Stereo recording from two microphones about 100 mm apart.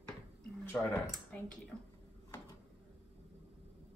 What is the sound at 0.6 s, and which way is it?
Speech, 15° left (ahead or behind).